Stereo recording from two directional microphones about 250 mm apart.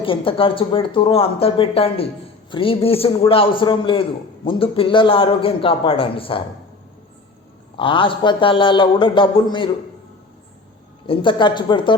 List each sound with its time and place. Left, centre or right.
0.0 s speech: left
7.8 s speech: left
11.0 s speech: left